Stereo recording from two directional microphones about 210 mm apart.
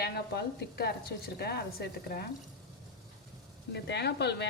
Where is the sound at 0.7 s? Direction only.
45° left (ahead or behind).